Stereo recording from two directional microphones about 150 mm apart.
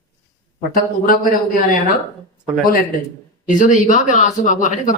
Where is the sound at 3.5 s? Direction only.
55° left (ahead or behind).